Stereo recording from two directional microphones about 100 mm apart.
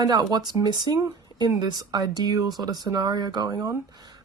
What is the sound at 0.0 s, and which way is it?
Speech, 45° right (ahead or behind).